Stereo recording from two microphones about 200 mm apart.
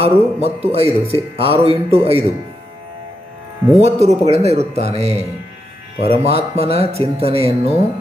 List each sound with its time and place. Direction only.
0.0 s speech: 30° right (ahead or behind)
3.8 s speech: 30° right (ahead or behind)